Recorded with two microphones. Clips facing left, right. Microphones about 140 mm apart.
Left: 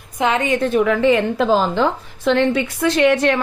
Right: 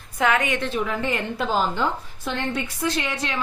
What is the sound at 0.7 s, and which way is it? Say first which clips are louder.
A woman's voice: left 11 dB; 65° left (ahead or behind).